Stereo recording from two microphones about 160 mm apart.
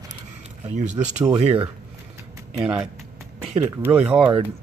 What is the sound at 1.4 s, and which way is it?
Speech, 35° right (ahead or behind).